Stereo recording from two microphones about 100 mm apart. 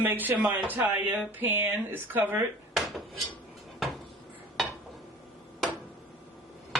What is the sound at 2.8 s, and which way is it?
Dishes, centre (ahead or behind).